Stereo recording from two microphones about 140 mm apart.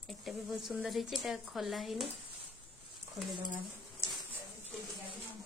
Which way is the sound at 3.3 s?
30° right (ahead or behind).